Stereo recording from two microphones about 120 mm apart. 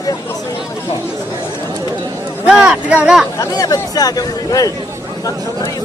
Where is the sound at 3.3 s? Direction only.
30° left (ahead or behind).